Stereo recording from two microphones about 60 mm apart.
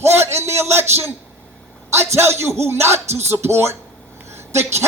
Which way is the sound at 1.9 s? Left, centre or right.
Right.